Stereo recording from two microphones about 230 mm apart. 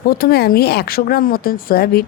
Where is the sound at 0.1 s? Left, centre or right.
Left.